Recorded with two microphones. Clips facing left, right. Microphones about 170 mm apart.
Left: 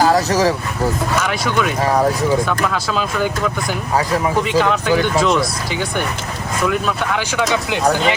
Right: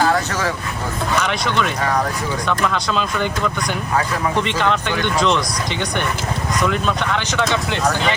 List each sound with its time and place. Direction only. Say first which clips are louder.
0.0 s vehicle: left 5 dB; 35° left (ahead or behind)
1.2 s speech: left 2 dB; 5° left (ahead or behind)
6.6 s speech: left 2 dB; 5° left (ahead or behind)